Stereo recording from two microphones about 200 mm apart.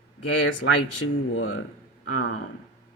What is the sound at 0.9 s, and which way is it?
Speech, 80° left.